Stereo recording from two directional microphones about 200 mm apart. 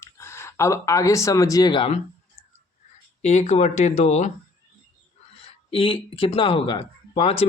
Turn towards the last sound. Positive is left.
turn(degrees=30)  # may be behind; listen again after turning